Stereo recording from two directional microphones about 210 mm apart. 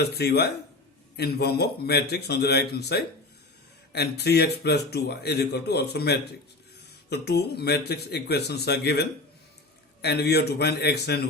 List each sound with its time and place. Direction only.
0.1 s speech: 50° left (ahead or behind)